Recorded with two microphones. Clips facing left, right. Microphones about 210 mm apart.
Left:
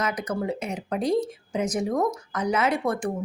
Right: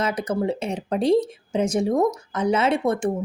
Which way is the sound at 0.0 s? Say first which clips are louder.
Right 4 dB; 30° right (ahead or behind).